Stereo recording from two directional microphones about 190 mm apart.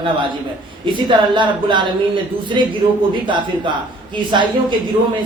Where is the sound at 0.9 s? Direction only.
25° right (ahead or behind).